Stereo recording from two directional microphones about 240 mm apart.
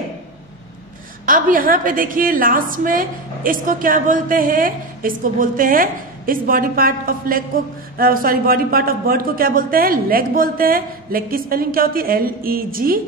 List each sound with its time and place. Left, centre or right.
1.2 s a woman's voice: right